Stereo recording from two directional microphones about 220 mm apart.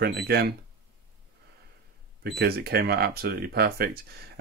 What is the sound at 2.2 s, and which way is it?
Speech, 45° right (ahead or behind).